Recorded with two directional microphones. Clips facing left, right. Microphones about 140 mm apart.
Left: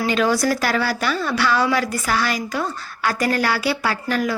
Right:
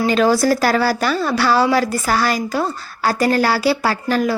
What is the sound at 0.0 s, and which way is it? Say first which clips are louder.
A woman's voice: right 4 dB; 35° right (ahead or behind).